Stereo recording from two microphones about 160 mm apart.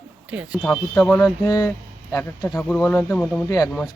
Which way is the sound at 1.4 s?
20° left (ahead or behind).